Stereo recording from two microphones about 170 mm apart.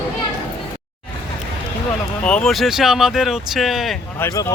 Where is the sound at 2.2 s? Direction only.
5° left (ahead or behind).